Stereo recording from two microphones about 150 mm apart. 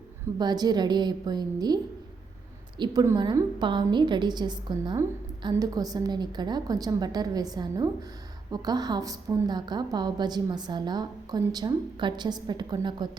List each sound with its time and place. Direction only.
0.3 s a woman's voice: 25° right (ahead or behind)